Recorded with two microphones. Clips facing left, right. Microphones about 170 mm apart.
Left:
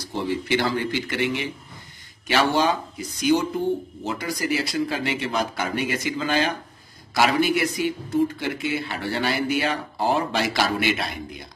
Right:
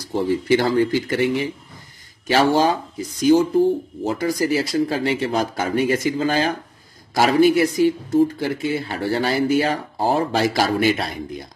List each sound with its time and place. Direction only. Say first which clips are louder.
0.1 s speech: right 6 dB; 40° right (ahead or behind)